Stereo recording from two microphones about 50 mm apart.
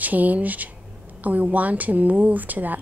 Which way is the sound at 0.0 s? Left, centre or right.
Right.